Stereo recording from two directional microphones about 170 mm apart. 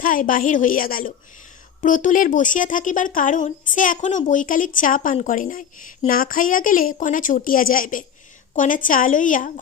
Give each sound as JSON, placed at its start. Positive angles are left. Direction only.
{"t": 0.0, "sound": "speech", "side_deg": 55}